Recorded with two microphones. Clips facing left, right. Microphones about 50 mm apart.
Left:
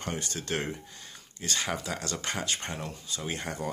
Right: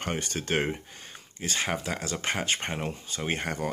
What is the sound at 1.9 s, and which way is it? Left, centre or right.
Speech, right.